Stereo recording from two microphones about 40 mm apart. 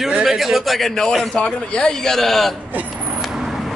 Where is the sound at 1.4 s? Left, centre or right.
Left.